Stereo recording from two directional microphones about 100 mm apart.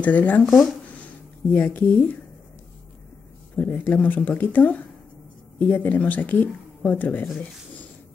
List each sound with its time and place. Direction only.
0.0 s speech: 15° left (ahead or behind)
0.4 s speech: centre (ahead or behind)
0.8 s a sound: 15° left (ahead or behind)
3.5 s speech: 20° left (ahead or behind)